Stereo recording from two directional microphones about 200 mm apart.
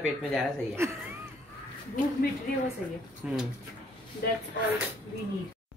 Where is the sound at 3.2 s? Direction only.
5° right (ahead or behind).